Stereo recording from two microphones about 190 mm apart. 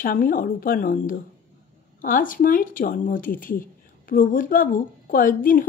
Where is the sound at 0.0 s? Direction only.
45° left (ahead or behind).